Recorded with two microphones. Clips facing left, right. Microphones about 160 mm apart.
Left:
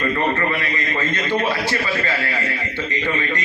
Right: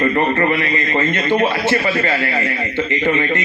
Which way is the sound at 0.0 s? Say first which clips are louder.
Right 5 dB; 55° right (ahead or behind).